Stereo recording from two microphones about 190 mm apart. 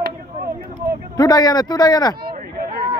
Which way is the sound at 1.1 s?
20° left (ahead or behind).